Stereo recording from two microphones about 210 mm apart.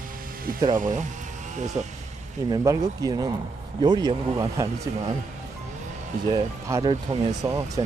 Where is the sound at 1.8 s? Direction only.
30° right (ahead or behind).